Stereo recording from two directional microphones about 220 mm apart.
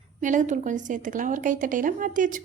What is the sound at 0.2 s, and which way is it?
A woman's voice, 35° right (ahead or behind).